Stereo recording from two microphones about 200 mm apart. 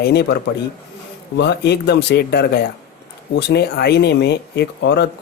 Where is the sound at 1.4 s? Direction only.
55° left (ahead or behind).